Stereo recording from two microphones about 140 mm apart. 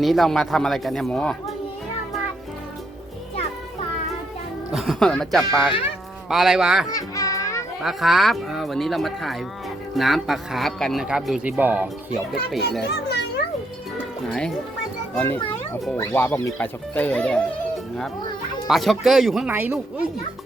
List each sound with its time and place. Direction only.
0.0 s speech: centre (ahead or behind)
4.7 s speech: centre (ahead or behind)
6.8 s music: 25° left (ahead or behind)
7.8 s speech: centre (ahead or behind)
14.3 s music: 5° left (ahead or behind)
15.1 s a child's voice: 15° left (ahead or behind)
18.7 s speech: centre (ahead or behind)